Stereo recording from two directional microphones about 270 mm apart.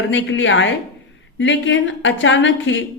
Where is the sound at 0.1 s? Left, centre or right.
Left.